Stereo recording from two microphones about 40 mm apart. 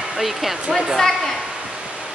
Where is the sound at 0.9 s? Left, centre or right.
Centre.